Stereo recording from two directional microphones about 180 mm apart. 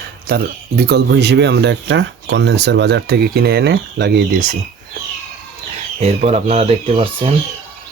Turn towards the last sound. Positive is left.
turn(degrees=-35)  # may be behind; listen again after turning